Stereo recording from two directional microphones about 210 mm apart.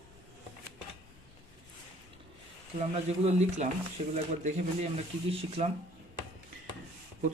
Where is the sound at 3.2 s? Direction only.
30° right (ahead or behind).